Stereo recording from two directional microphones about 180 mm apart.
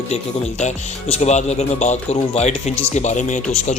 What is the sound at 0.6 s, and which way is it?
Speech, 35° left (ahead or behind).